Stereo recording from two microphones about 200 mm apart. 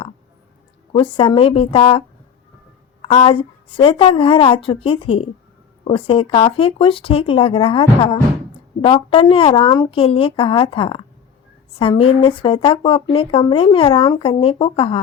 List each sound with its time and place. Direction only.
0.9 s speech: 25° left (ahead or behind)